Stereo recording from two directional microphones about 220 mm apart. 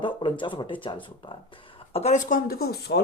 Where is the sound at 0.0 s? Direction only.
20° left (ahead or behind).